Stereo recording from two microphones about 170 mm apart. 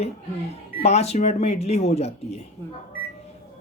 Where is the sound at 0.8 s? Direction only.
40° left (ahead or behind).